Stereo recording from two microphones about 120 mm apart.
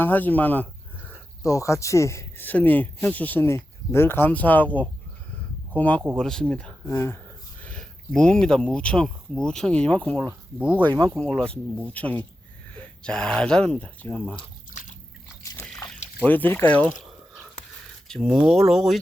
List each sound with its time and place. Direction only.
0.0 s a sound: 15° left (ahead or behind)
1.4 s speech: 25° left (ahead or behind); by 6.9 s 10° left (ahead or behind)
6.9 s speech: 20° left (ahead or behind)
7.6 s speech: 10° left (ahead or behind)
14.7 s biting: 90° left
16.2 s speech: 15° left (ahead or behind)
18.1 s speech: centre (ahead or behind)